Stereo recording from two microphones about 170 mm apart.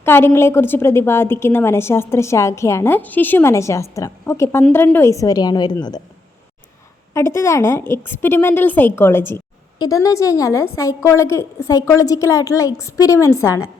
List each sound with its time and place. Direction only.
0.0 s a woman's voice: 15° left (ahead or behind)
7.1 s a woman's voice: 15° left (ahead or behind)